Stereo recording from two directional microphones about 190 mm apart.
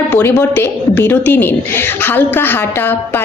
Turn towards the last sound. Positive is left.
turn(degrees=10)  # may be behind; listen again after turning